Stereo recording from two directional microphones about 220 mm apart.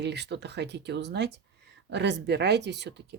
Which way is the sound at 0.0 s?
50° right (ahead or behind).